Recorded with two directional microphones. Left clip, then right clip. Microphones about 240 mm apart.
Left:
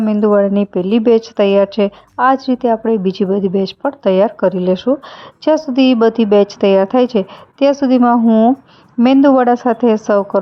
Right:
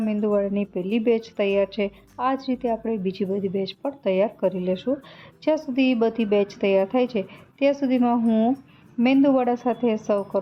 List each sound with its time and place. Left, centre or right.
0.0 s a woman's voice: left